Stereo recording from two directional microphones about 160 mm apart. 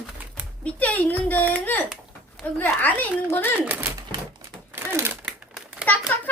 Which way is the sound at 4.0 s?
20° right (ahead or behind).